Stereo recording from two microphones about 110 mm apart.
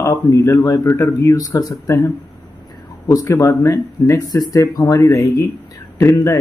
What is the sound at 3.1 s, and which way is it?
Speech, 30° left (ahead or behind).